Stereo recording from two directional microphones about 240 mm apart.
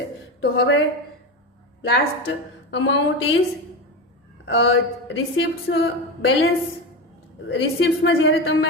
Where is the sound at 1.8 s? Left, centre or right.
Left.